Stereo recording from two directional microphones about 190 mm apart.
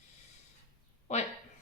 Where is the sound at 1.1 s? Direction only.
35° left (ahead or behind).